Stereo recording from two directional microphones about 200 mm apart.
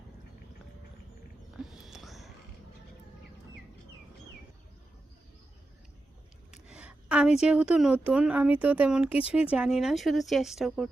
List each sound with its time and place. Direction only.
1.5 s whispering: centre (ahead or behind)
6.5 s a sound: 5° right (ahead or behind)
7.4 s speech: 5° right (ahead or behind)